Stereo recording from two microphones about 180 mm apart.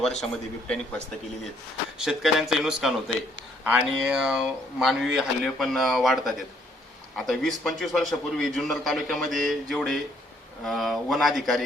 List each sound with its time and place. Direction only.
0.0 s a man's voice: 5° left (ahead or behind)
2.0 s a man's voice: centre (ahead or behind)